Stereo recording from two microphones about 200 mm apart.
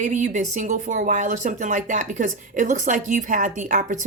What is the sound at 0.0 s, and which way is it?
A woman's voice, 40° right (ahead or behind).